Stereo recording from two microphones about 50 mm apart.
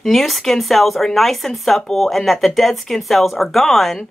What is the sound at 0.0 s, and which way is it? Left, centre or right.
Speech, centre.